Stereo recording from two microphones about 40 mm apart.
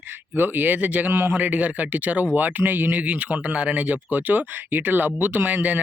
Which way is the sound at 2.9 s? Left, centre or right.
Right.